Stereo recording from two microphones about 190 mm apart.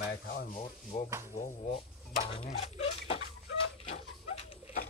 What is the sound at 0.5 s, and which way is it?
Speech, 35° left (ahead or behind).